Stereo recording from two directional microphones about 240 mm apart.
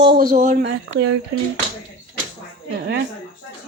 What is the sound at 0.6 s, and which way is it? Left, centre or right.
Speech, right.